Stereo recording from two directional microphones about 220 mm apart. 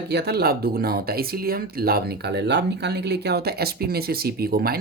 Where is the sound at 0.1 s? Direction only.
50° right (ahead or behind).